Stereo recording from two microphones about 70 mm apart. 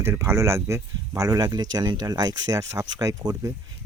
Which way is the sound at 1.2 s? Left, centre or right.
Right.